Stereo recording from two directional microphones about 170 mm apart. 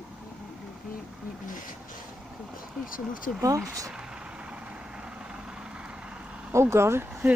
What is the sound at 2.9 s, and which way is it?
Speech, 55° left (ahead or behind).